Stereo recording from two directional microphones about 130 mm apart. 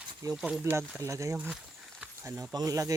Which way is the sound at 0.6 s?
15° right (ahead or behind).